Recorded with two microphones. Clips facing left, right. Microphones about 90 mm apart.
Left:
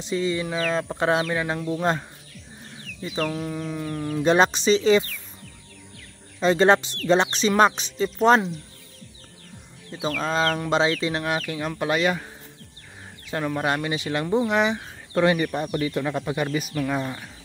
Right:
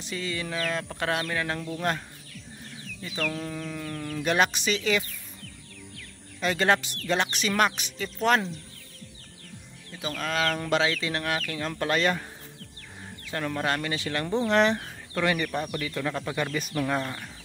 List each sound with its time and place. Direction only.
0.0 s speech: 20° left (ahead or behind)
3.3 s speech: 15° left (ahead or behind)
6.4 s speech: 25° left (ahead or behind)
10.0 s speech: 30° left (ahead or behind); by 12.3 s 10° left (ahead or behind)
13.3 s speech: 15° left (ahead or behind)
14.2 s speech: 10° left (ahead or behind)
15.1 s speech: 20° left (ahead or behind)